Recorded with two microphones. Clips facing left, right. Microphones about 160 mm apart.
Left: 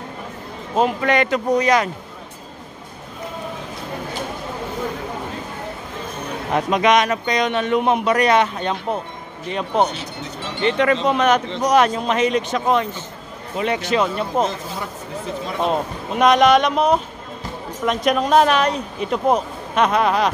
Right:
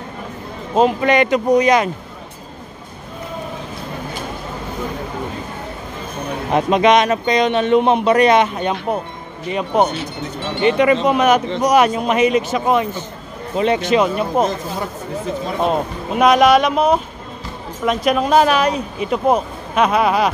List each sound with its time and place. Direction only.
0.7 s speech: 20° right (ahead or behind)
6.5 s speech: 25° right (ahead or behind); by 9.8 s 10° right (ahead or behind)
9.8 s speech: 60° right (ahead or behind)
10.6 s speech: 10° right (ahead or behind)
13.6 s speech: 25° right (ahead or behind)
15.6 s speech: 5° right (ahead or behind)